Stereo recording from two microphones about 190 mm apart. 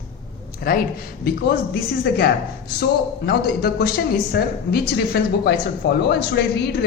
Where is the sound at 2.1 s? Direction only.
60° left (ahead or behind).